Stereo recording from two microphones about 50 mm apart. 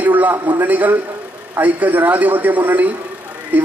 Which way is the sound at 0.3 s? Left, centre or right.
Right.